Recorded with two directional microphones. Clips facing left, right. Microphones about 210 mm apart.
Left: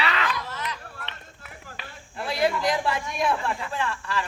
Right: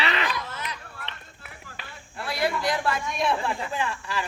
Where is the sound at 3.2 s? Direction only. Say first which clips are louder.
Left 1 dB; centre (ahead or behind).